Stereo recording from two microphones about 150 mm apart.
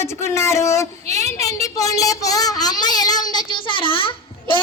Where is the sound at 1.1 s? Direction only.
20° left (ahead or behind).